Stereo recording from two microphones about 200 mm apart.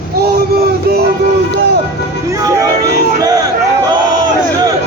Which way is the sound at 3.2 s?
20° right (ahead or behind).